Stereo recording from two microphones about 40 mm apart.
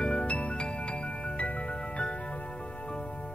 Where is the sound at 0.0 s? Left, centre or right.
Left.